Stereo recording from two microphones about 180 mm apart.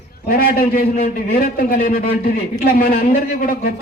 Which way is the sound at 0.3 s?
55° left (ahead or behind).